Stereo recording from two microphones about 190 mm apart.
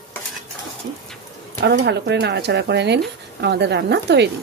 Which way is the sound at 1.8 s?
65° right (ahead or behind).